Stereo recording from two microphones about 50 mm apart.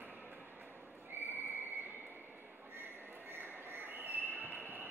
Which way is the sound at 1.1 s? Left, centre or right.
Right.